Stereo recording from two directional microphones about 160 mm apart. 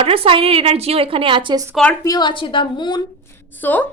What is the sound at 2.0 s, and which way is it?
A woman's voice, 25° left (ahead or behind).